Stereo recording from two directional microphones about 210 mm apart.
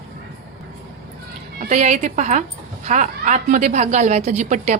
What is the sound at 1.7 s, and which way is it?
A woman's voice, 35° right (ahead or behind).